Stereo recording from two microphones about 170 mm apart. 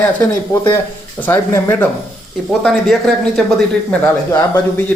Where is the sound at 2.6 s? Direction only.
Centre (ahead or behind).